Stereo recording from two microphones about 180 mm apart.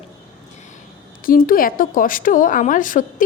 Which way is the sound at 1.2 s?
50° left (ahead or behind).